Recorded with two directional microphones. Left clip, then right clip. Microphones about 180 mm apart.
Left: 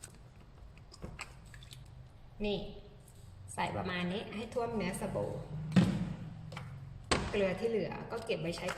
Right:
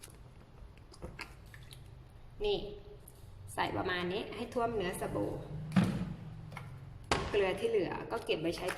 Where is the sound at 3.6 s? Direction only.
20° right (ahead or behind).